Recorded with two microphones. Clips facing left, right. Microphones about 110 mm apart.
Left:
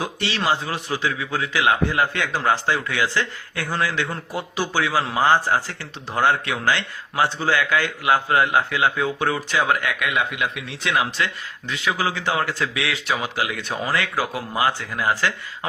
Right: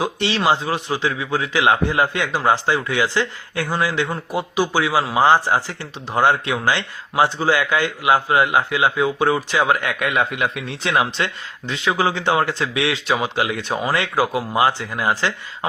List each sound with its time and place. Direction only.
0.0 s speech: 20° right (ahead or behind)